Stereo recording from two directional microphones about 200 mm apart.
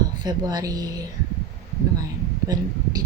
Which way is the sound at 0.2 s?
20° right (ahead or behind).